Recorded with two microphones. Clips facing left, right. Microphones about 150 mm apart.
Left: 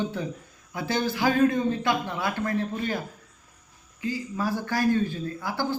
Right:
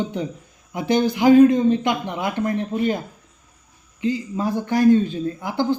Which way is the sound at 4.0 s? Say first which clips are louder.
Right 6 dB; 20° right (ahead or behind).